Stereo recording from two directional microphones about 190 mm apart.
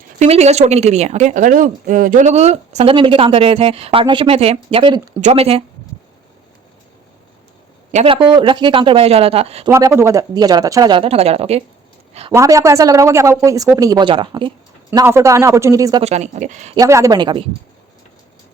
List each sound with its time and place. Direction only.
0.2 s speech: 35° right (ahead or behind)
7.9 s speech: 30° right (ahead or behind)
9.6 s speech: 15° right (ahead or behind); by 11.6 s 30° right (ahead or behind)
12.3 s speech: 15° right (ahead or behind)
14.8 s speech: 15° right (ahead or behind)
16.0 s speech: 35° right (ahead or behind)
16.7 s speech: 15° right (ahead or behind)